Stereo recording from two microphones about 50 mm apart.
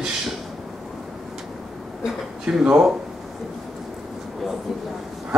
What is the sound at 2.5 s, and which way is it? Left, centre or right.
Speech, centre.